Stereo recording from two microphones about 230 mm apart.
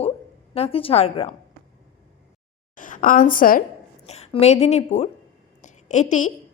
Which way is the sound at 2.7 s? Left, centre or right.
Left.